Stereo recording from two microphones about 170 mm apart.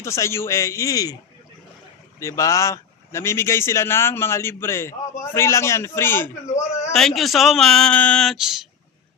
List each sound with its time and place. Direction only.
0.0 s speech: 15° left (ahead or behind)
2.1 s speech: 20° left (ahead or behind)
6.9 s speech: centre (ahead or behind)